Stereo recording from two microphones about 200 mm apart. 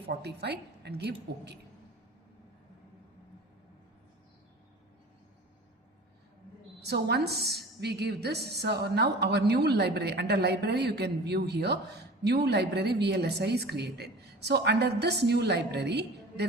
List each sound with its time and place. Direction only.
0.1 s a woman's voice: 55° right (ahead or behind)
6.7 s a woman's voice: 55° right (ahead or behind)